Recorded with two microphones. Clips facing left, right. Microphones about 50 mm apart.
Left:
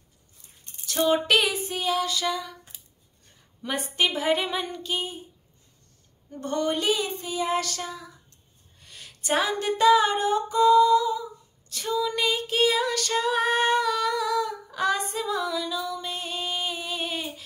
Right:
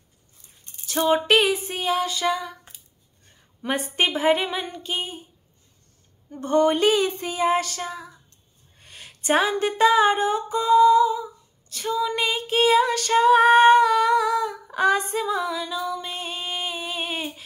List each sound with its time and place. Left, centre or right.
0.8 s female singing: centre
3.9 s female singing: right
6.3 s speech: centre
6.7 s a sound: right
7.3 s female singing: right
8.7 s a sound: right
11.7 s female singing: centre
12.0 s female singing: centre